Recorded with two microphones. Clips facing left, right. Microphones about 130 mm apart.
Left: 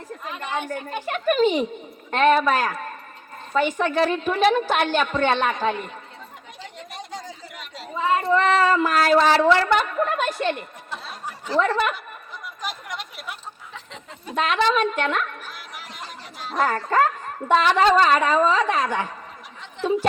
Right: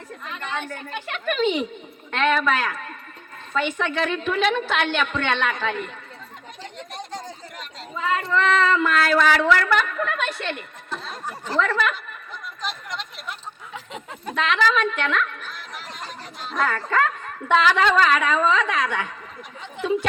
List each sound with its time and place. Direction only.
0.9 s a woman's voice: 40° left (ahead or behind)
6.7 s chatter: 5° left (ahead or behind)
7.9 s female singing: 25° left (ahead or behind)
8.4 s a woman's voice: 40° left (ahead or behind)
10.9 s a sound: 10° left (ahead or behind)
11.5 s a woman's voice: 30° left (ahead or behind)
12.6 s a sound: 10° left (ahead or behind)
14.3 s a woman's voice: 40° left (ahead or behind)
15.4 s chatter: 10° left (ahead or behind)
16.5 s a woman's voice: 35° left (ahead or behind)
19.8 s a sound: 5° right (ahead or behind)